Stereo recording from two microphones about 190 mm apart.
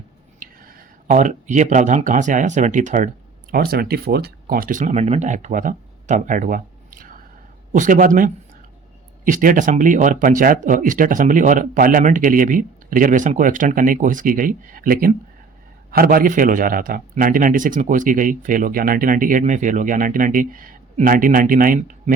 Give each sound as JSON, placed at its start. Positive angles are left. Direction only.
{"t": 0.3, "sound": "speech", "side_deg": -45}
{"t": 3.5, "sound": "a man's voice", "side_deg": -50}